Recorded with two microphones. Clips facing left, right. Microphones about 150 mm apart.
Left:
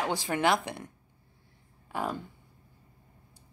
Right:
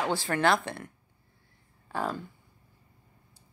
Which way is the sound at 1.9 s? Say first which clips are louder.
Right 1 dB; 15° left (ahead or behind).